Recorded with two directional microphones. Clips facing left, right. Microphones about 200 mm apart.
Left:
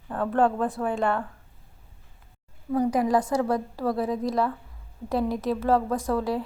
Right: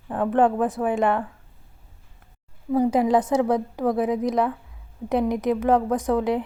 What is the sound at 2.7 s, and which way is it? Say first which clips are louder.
A woman's voice: right 3 dB; 25° right (ahead or behind).